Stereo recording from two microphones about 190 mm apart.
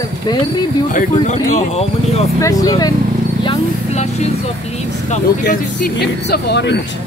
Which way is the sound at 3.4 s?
35° left (ahead or behind).